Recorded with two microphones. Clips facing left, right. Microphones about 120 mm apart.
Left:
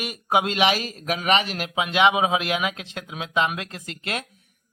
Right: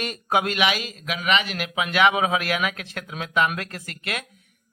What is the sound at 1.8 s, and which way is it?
A man's voice, 20° left (ahead or behind).